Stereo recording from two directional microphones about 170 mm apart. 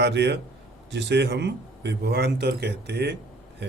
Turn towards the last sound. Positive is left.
turn(degrees=-75)  # may be behind; listen again after turning